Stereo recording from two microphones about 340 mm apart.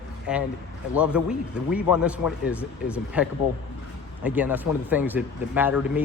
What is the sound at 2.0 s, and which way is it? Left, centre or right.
Speech, centre.